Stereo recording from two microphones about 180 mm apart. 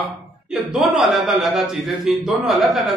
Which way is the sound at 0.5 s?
5° right (ahead or behind).